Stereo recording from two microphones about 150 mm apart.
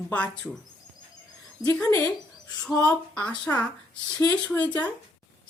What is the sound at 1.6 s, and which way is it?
Speech, 20° left (ahead or behind).